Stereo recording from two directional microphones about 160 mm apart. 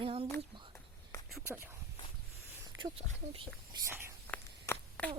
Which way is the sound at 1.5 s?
15° right (ahead or behind).